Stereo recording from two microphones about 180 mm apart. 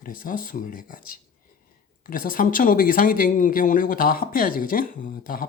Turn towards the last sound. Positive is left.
turn(degrees=50)  # may be behind; listen again after turning